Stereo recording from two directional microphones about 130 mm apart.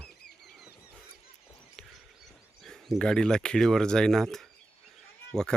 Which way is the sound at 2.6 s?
5° left (ahead or behind).